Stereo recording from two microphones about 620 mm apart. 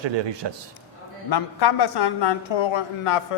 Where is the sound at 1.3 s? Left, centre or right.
Left.